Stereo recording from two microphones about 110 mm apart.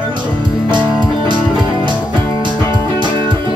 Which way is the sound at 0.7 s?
45° right (ahead or behind).